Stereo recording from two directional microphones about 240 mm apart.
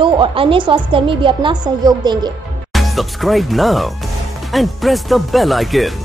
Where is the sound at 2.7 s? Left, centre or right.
Centre.